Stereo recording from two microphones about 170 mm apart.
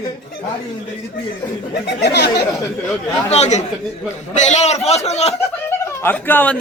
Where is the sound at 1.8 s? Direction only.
85° left.